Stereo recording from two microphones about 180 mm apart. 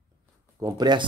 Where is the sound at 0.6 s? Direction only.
25° right (ahead or behind).